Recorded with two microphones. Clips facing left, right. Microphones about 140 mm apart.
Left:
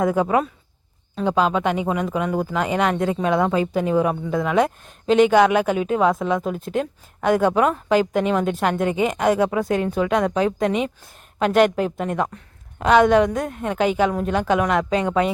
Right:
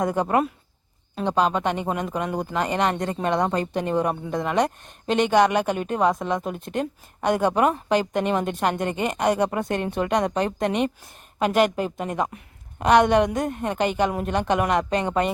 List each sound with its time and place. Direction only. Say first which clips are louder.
0.0 s speech: left 3 dB; centre (ahead or behind)